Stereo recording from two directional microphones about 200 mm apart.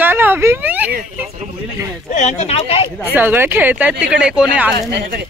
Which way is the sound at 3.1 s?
10° right (ahead or behind).